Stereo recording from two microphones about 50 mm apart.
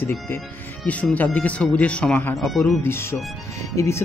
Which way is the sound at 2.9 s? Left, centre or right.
Left.